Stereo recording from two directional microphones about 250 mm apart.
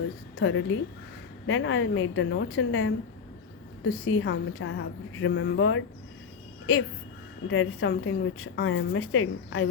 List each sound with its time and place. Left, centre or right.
0.3 s a woman's voice: left
7.4 s a woman's voice: left